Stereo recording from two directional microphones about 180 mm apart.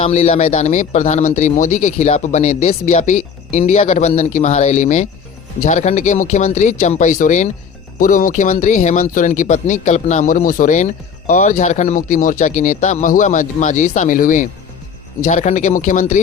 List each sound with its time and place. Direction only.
0.0 s a man's voice: 40° left (ahead or behind)